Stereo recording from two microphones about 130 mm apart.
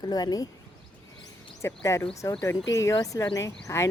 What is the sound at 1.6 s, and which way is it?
Speech, 25° left (ahead or behind).